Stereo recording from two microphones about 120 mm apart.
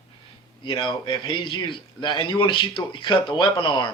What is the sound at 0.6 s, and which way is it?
A man's voice, 45° left (ahead or behind).